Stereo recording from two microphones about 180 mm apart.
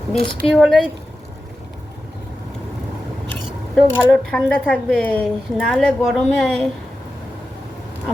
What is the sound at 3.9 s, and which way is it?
Speech, 10° right (ahead or behind).